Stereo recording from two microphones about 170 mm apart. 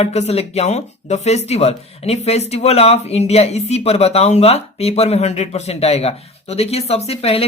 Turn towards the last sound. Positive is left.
turn(degrees=35)  # may be behind; listen again after turning